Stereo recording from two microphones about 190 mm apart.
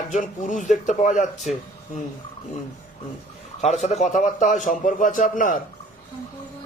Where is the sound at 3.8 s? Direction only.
35° left (ahead or behind).